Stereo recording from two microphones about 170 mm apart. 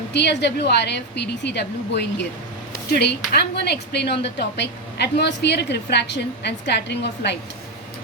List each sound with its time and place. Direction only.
0.1 s a woman's voice: 85° left
2.9 s a woman's voice: 70° left (ahead or behind)